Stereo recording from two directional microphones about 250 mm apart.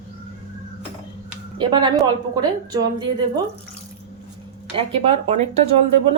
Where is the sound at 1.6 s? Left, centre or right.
Centre.